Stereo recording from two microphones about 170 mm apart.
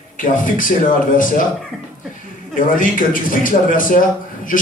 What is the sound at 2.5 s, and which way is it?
A man's voice, 50° left (ahead or behind).